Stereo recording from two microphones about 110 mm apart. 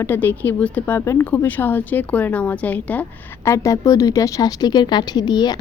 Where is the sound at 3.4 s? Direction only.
30° left (ahead or behind).